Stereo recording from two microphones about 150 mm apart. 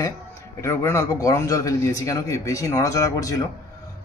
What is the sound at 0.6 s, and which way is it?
A man's voice, 20° left (ahead or behind).